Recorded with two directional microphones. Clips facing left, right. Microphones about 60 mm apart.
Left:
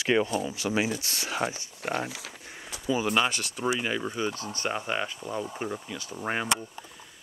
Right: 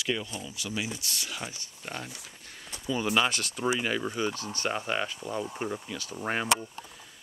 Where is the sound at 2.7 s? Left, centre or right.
Centre.